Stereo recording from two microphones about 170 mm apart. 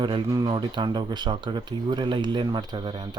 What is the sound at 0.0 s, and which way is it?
Speech, 25° right (ahead or behind).